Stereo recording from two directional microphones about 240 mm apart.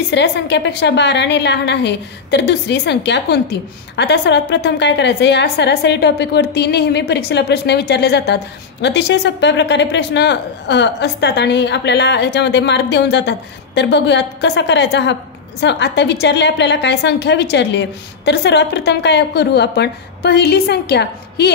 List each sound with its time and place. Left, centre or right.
0.1 s a woman's voice: left